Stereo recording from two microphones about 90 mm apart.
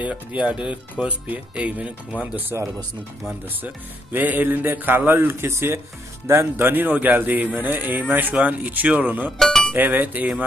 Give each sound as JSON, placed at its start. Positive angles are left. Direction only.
{"t": 0.0, "sound": "speech", "side_deg": -15}
{"t": 4.1, "sound": "speech", "side_deg": -20}
{"t": 9.4, "sound": "speech", "side_deg": 0}
{"t": 9.7, "sound": "speech", "side_deg": -20}